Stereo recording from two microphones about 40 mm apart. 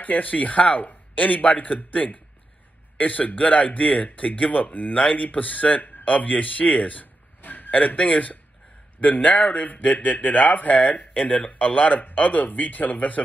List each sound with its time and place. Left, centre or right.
0.0 s speech: left
6.7 s a sound: left
7.7 s speech: left
11.5 s speech: left